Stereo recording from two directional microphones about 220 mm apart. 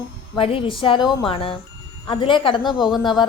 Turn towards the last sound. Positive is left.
turn(degrees=20)  # may be behind; listen again after turning